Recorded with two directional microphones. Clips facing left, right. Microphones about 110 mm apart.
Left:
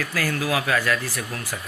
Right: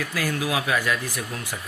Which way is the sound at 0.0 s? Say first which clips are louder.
Left 1 dB; 15° right (ahead or behind).